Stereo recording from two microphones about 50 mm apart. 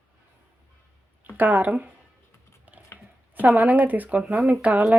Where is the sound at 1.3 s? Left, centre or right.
Right.